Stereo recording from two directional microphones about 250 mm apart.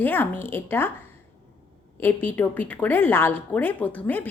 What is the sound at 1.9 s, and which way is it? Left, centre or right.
A woman's voice, centre.